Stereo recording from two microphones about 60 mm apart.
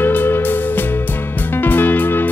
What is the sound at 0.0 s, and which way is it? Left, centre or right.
Music, left.